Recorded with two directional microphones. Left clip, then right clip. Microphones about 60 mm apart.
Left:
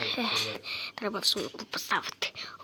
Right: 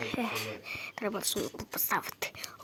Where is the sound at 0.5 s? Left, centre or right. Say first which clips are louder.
Left 3 dB; centre.